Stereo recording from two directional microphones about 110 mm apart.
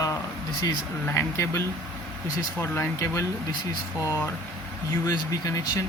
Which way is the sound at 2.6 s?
20° left (ahead or behind).